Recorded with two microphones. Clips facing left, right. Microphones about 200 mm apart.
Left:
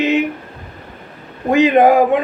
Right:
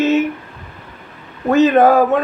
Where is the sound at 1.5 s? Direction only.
15° left (ahead or behind).